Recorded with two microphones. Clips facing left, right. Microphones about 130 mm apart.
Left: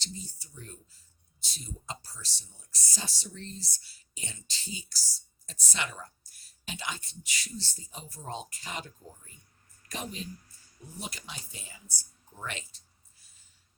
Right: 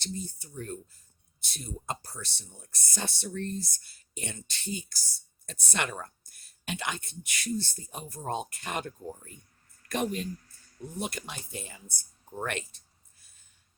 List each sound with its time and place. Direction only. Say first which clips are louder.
0.0 s speech: right 6 dB; 50° right (ahead or behind)